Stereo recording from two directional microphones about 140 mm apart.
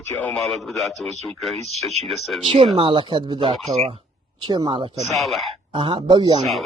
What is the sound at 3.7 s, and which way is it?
Speech, 45° right (ahead or behind).